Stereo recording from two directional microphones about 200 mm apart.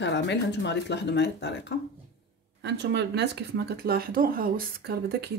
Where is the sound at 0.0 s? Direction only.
60° left (ahead or behind).